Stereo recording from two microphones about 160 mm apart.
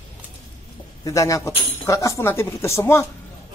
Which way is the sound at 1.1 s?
20° left (ahead or behind).